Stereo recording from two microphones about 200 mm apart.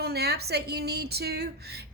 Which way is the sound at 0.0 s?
55° right (ahead or behind).